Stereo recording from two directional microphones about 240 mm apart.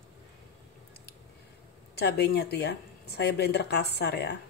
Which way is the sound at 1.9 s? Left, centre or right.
Left.